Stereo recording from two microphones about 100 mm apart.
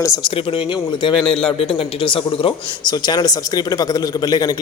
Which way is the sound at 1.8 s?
60° left (ahead or behind).